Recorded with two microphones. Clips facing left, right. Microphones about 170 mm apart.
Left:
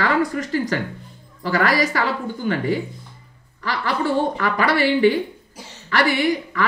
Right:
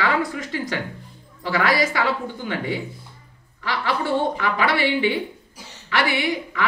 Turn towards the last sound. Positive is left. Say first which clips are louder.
# left 4 dB
turn(degrees=40)  # may be behind; listen again after turning